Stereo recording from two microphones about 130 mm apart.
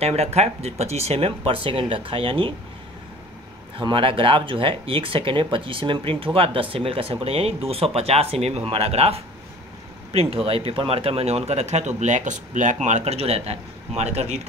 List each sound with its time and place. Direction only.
0.0 s speech: 55° right (ahead or behind)
3.7 s speech: 40° right (ahead or behind); by 12.7 s 75° right (ahead or behind)
12.8 s speech: 60° right (ahead or behind)